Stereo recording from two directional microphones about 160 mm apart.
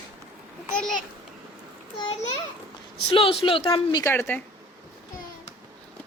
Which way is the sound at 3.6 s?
25° left (ahead or behind).